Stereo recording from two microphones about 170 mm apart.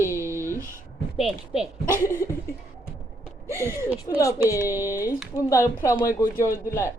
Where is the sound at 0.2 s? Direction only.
15° right (ahead or behind).